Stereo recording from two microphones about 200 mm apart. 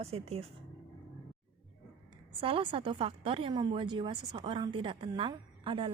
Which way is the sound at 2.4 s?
25° right (ahead or behind).